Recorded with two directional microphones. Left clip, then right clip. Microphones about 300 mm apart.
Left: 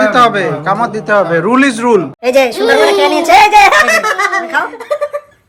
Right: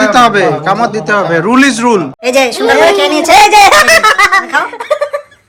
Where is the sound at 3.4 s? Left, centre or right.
Right.